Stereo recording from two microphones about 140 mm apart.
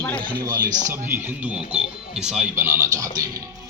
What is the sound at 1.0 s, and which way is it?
Speech, 10° right (ahead or behind).